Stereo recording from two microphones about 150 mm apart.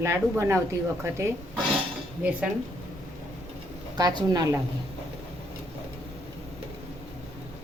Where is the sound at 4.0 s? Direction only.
25° right (ahead or behind).